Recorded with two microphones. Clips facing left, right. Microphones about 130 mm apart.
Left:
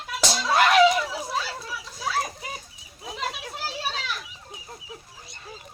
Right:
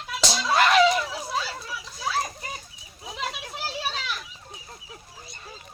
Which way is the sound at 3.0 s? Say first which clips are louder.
Left 1 dB; centre (ahead or behind).